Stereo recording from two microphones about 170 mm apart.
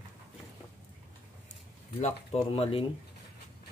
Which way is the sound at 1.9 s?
40° left (ahead or behind).